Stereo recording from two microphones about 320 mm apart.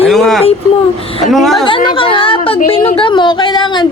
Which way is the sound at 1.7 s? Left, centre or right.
Centre.